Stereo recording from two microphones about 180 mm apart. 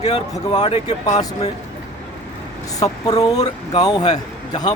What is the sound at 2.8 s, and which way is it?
A man's voice, 20° left (ahead or behind).